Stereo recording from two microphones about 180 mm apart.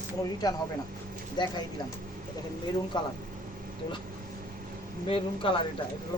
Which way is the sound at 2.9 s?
25° left (ahead or behind).